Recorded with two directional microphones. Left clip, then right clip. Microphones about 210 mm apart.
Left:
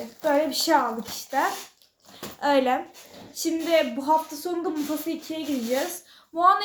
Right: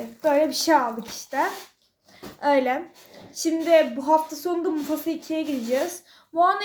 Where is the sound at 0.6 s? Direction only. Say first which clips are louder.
Right 2 dB; 5° right (ahead or behind).